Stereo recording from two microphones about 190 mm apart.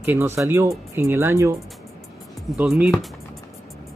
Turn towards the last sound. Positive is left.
turn(degrees=-5)  # may be behind; listen again after turning